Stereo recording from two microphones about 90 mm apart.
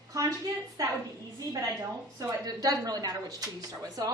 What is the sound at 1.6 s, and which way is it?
Speech, 40° right (ahead or behind).